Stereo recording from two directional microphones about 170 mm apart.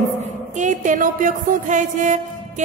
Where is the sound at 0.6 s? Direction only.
45° right (ahead or behind).